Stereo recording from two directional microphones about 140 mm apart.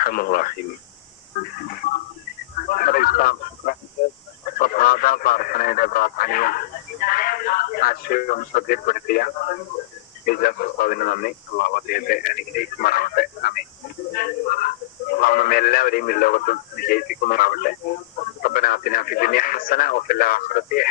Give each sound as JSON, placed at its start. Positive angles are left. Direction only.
{"t": 0.0, "sound": "speech", "side_deg": 90}
{"t": 2.6, "sound": "speech", "side_deg": 90}